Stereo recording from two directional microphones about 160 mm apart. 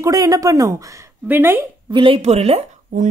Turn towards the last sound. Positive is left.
turn(degrees=-40)  # may be behind; listen again after turning